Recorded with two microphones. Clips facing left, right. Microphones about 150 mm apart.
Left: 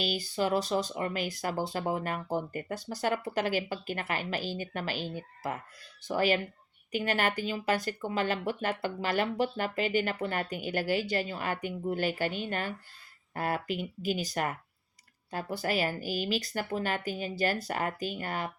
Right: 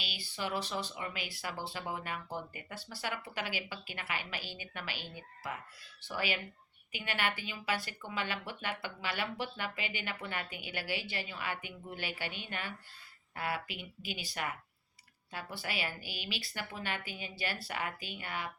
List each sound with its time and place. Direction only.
0.0 s speech: 45° left (ahead or behind)